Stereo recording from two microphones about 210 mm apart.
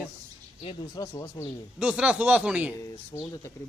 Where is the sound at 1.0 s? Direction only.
15° left (ahead or behind).